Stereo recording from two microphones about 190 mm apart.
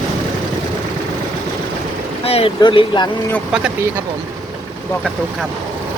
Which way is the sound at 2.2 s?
30° left (ahead or behind).